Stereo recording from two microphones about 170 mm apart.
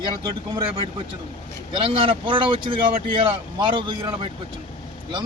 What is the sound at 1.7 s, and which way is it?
A man's voice, 30° right (ahead or behind).